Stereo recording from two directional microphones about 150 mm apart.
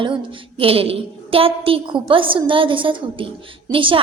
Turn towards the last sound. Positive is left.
turn(degrees=-35)  # may be behind; listen again after turning